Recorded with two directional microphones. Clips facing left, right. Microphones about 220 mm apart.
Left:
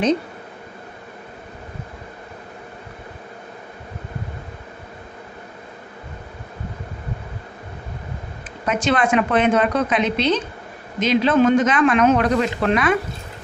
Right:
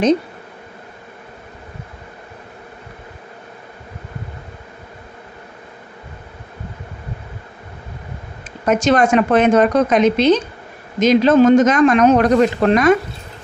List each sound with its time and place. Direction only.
8.6 s speech: 45° right (ahead or behind)